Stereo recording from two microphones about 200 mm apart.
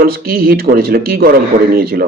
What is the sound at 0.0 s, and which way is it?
Speech, 50° right (ahead or behind).